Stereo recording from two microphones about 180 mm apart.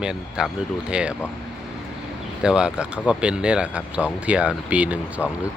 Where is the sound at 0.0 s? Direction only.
5° right (ahead or behind).